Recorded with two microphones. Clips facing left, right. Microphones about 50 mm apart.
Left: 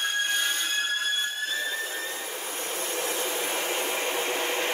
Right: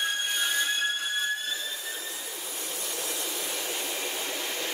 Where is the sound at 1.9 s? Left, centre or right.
Left.